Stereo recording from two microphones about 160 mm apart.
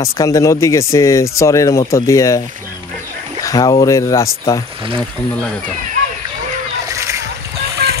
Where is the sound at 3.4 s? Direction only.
25° left (ahead or behind).